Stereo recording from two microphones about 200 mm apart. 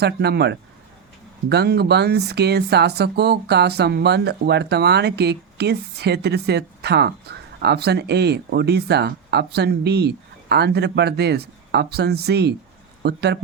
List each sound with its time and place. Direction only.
0.0 s speech: 55° right (ahead or behind)